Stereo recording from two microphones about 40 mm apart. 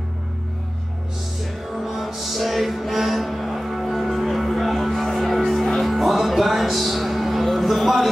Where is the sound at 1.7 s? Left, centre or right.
Centre.